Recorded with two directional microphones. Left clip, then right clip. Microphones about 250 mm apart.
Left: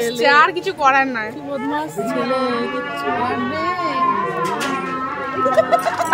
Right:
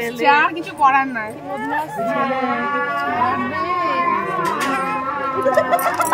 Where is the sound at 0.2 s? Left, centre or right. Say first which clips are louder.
Left 1 dB; left.